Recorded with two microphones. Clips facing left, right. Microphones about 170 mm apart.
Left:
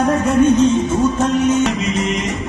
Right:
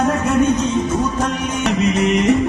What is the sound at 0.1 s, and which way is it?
Music, 30° left (ahead or behind).